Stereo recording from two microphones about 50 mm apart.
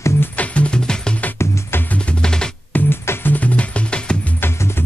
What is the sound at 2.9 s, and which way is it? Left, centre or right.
Music, left.